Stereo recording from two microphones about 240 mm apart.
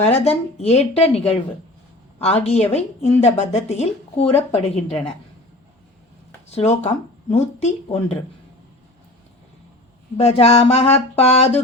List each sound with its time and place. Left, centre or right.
0.0 s a woman's voice: left
6.5 s a woman's voice: left
10.2 s a woman's voice: left